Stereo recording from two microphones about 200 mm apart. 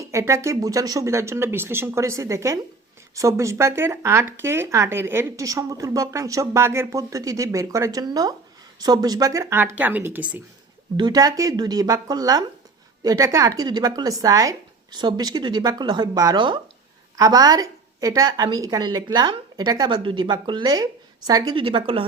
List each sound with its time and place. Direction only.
0.0 s speech: 15° right (ahead or behind)
10.9 s a woman's voice: 20° right (ahead or behind)